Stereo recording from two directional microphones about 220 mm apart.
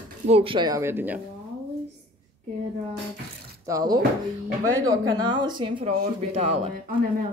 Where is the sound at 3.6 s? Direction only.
15° right (ahead or behind).